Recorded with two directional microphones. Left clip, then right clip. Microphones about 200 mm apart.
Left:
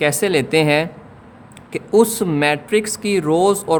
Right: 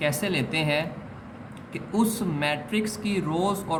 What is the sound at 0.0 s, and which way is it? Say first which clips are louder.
Speech: left 10 dB; 60° left (ahead or behind).